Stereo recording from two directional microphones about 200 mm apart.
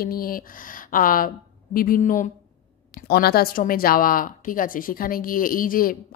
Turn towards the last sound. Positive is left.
turn(degrees=45)  # may be behind; listen again after turning